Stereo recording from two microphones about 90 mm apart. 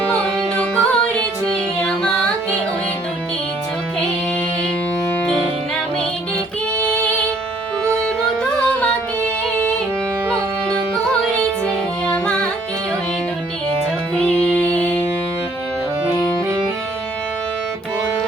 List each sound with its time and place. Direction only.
0.8 s music: 10° left (ahead or behind)
6.7 s music: 15° left (ahead or behind)
8.7 s music: 15° left (ahead or behind)
10.9 s music: 10° left (ahead or behind)
14.3 s music: 15° left (ahead or behind)